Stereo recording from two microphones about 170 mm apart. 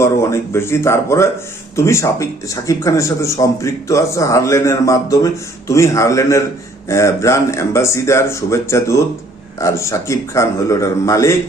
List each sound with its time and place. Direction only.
0.0 s speech: 15° left (ahead or behind)